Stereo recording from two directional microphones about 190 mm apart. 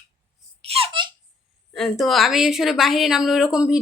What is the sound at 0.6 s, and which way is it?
Babbling, 30° right (ahead or behind).